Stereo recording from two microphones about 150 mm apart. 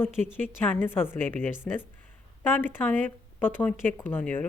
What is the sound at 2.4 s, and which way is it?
A woman's voice, 15° left (ahead or behind).